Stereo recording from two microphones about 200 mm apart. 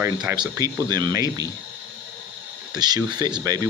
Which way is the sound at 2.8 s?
20° right (ahead or behind).